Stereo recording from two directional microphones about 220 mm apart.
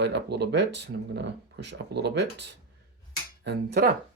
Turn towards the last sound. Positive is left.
turn(degrees=-45)  # may be behind; listen again after turning